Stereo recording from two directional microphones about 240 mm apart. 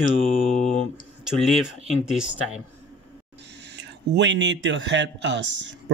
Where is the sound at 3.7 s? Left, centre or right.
Right.